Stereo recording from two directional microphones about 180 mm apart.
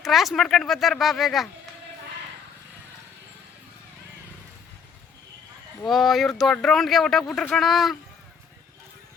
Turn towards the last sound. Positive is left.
turn(degrees=0)  # may be behind; listen again after turning